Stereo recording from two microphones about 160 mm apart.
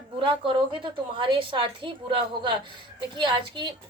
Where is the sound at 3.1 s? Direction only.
30° right (ahead or behind).